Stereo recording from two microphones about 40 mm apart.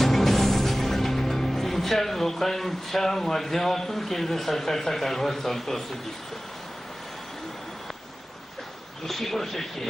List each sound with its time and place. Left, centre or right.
0.0 s music: centre
9.0 s speech: centre